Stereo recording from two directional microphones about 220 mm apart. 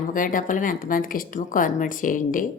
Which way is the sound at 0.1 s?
40° left (ahead or behind).